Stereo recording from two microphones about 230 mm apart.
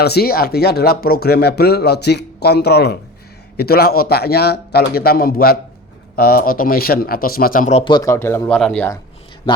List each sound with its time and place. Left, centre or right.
0.0 s speech: left; by 9.0 s centre